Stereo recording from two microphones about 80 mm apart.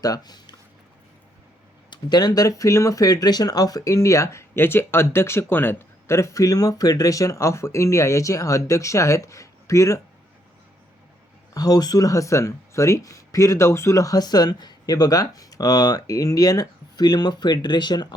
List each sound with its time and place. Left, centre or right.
0.0 s speech: left
1.9 s speech: left
11.5 s speech: left